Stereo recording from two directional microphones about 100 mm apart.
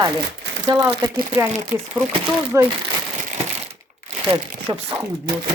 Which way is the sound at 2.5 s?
30° right (ahead or behind).